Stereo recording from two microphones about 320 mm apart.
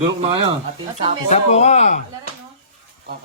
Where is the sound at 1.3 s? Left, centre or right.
Centre.